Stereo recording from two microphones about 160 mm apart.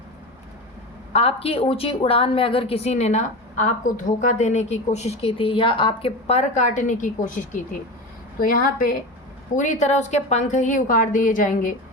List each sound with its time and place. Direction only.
1.1 s a woman's voice: 40° left (ahead or behind); by 9.0 s 60° left (ahead or behind)
9.6 s a woman's voice: 45° left (ahead or behind)